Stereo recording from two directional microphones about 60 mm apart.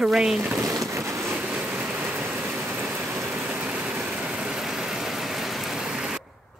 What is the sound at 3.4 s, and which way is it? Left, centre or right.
Vehicle, centre.